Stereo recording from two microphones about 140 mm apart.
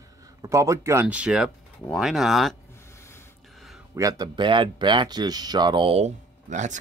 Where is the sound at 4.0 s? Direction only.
25° right (ahead or behind).